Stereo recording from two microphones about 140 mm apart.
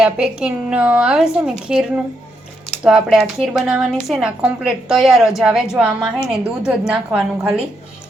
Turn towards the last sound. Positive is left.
turn(degrees=-5)  # may be behind; listen again after turning